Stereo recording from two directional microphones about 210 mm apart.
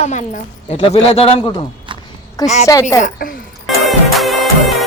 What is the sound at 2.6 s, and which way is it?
Speech, 15° left (ahead or behind).